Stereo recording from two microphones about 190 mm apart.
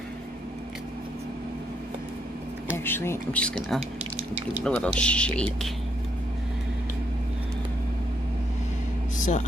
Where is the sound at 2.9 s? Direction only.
10° left (ahead or behind).